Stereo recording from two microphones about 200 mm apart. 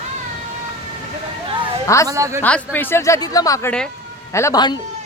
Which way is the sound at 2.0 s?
15° right (ahead or behind).